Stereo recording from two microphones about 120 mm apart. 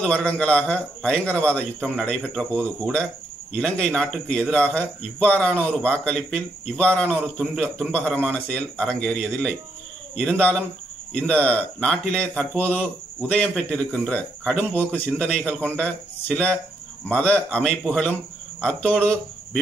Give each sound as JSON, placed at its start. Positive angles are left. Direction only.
{"t": 0.0, "sound": "a man's voice", "side_deg": 10}